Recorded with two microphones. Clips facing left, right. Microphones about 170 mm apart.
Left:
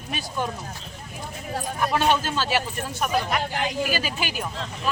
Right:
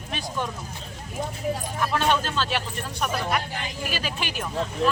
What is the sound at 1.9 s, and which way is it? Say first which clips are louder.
Speech: left 1 dB; 10° left (ahead or behind).